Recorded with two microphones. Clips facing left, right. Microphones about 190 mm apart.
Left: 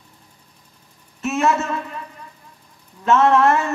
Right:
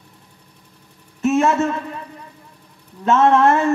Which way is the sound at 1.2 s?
30° right (ahead or behind).